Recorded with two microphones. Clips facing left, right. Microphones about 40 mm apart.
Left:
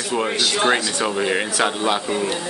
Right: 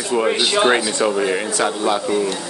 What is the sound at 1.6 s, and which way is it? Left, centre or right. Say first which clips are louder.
Speech: right 1 dB; left.